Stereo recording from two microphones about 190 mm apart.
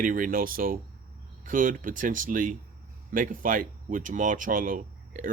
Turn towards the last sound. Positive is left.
turn(degrees=-45)  # may be behind; listen again after turning